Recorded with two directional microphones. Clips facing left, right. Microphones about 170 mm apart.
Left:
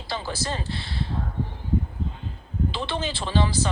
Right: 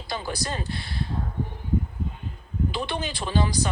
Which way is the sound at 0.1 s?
15° right (ahead or behind).